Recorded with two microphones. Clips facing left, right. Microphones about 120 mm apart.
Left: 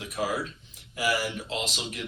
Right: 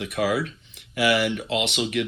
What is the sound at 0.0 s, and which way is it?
Speech, 70° right (ahead or behind).